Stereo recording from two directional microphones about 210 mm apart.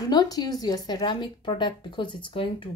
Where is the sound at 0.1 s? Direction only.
20° left (ahead or behind).